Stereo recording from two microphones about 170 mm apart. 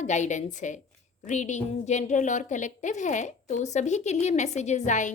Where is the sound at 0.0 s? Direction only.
45° left (ahead or behind).